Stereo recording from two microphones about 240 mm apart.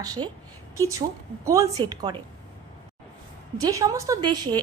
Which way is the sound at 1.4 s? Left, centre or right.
Centre.